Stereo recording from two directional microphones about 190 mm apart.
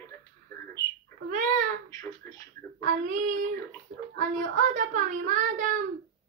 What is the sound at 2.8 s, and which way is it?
Child singing, 45° right (ahead or behind).